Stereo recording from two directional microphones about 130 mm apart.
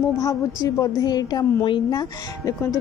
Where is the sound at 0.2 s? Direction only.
25° left (ahead or behind).